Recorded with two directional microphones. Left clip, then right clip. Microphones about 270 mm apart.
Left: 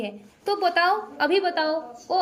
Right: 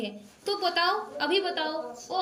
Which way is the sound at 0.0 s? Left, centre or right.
Centre.